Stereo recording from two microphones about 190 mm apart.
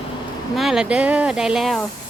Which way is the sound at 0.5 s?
Centre (ahead or behind).